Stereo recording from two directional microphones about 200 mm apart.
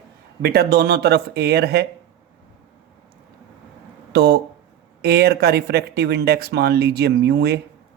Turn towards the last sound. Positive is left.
turn(degrees=-55)  # may be behind; listen again after turning